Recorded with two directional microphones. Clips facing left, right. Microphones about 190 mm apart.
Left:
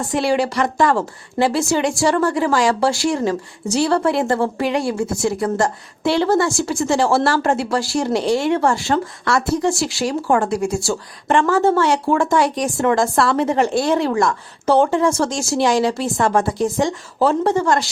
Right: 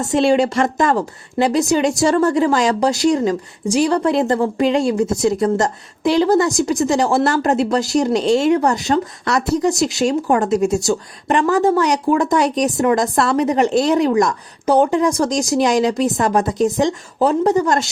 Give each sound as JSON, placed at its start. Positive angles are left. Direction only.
{"t": 0.0, "sound": "a woman's voice", "side_deg": -25}